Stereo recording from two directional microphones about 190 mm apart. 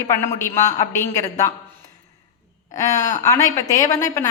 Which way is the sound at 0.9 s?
15° left (ahead or behind).